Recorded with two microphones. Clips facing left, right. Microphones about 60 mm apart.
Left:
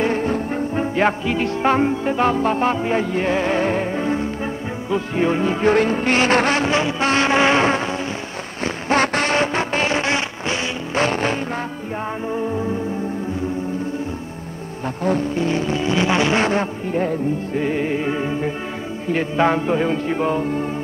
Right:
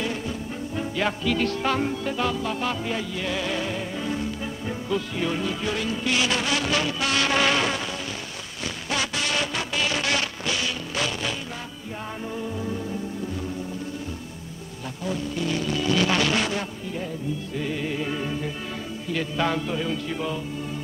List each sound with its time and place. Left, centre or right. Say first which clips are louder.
0.0 s music: left 10 dB; left
6.6 s music: left 6 dB; left
11.0 s vehicle: left 10 dB; left
15.0 s music: left 8 dB; left